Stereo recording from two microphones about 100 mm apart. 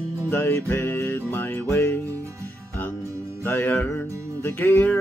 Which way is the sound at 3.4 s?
20° left (ahead or behind).